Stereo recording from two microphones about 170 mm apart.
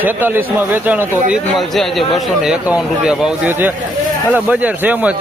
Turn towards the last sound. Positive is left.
turn(degrees=-10)  # may be behind; listen again after turning